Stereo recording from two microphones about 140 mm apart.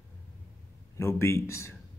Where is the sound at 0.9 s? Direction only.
20° left (ahead or behind).